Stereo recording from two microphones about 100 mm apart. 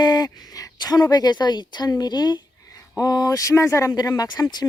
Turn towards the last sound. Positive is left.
turn(degrees=40)  # may be behind; listen again after turning